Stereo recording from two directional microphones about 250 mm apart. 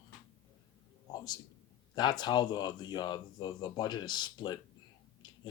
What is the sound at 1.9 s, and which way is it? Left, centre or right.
Speech, centre.